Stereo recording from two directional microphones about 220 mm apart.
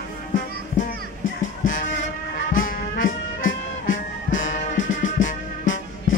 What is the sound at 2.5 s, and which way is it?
Brass instrument, 40° left (ahead or behind).